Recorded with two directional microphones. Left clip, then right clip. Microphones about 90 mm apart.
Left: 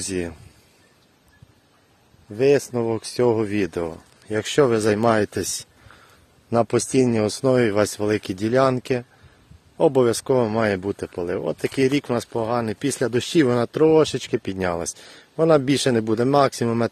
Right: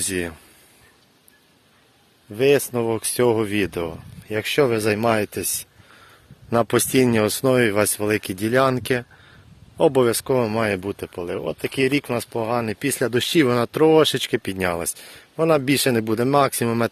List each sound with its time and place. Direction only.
0.0 s speech: 5° left (ahead or behind)
2.3 s speech: 20° left (ahead or behind)
2.8 s speech: 5° left (ahead or behind)
3.7 s speech: 45° left (ahead or behind); by 5.6 s 75° left (ahead or behind)
6.5 s speech: centre (ahead or behind)
7.4 s speech: 20° left (ahead or behind)
7.9 s speech: 35° left (ahead or behind)
8.7 s speech: centre (ahead or behind)
10.1 s speech: 40° left (ahead or behind)
10.8 s speech: 65° left (ahead or behind); by 13.1 s 30° left (ahead or behind)
13.1 s speech: 15° left (ahead or behind)
13.8 s speech: centre (ahead or behind)
14.4 s speech: 25° left (ahead or behind)
16.4 s speech: 20° left (ahead or behind)